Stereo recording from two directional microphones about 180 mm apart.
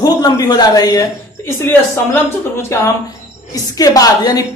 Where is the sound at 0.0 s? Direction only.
20° left (ahead or behind).